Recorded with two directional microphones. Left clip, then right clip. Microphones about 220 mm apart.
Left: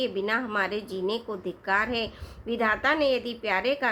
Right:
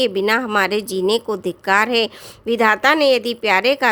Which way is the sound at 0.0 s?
50° right (ahead or behind).